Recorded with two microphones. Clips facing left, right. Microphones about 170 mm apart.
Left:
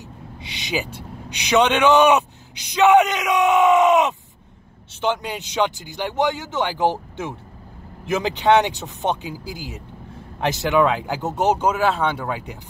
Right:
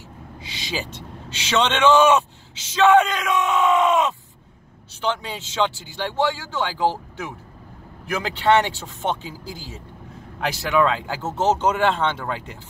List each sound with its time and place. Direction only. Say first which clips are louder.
0.4 s speech: left 3 dB; 20° left (ahead or behind)